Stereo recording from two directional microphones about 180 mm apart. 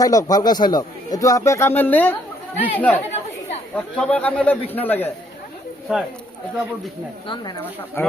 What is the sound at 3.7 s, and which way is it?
A man's voice, 5° left (ahead or behind).